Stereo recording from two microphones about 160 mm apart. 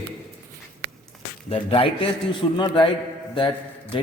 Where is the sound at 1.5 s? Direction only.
35° left (ahead or behind).